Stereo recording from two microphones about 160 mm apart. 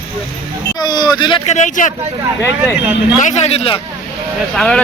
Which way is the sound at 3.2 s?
45° left (ahead or behind).